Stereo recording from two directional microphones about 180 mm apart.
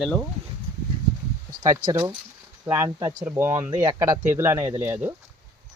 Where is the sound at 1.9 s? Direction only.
15° right (ahead or behind).